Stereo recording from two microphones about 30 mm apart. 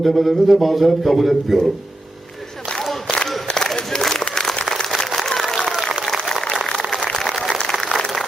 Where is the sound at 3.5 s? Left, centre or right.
Left.